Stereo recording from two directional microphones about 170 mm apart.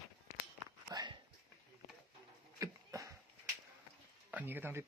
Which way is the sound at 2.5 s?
20° right (ahead or behind).